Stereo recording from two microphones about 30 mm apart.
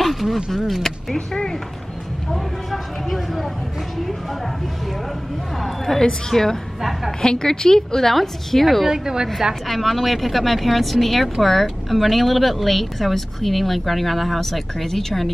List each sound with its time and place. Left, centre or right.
0.0 s a sound: centre
1.1 s speech: left
2.3 s speech: centre
5.9 s a woman's voice: centre
8.8 s a woman's voice: centre
9.7 s speech: centre